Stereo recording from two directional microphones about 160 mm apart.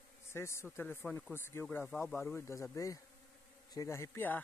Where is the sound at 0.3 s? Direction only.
15° left (ahead or behind).